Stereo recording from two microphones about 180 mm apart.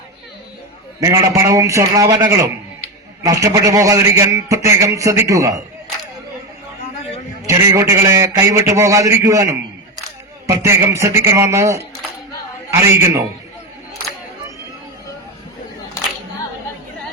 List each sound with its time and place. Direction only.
0.9 s a man's voice: 20° right (ahead or behind)
7.4 s a man's voice: 15° right (ahead or behind)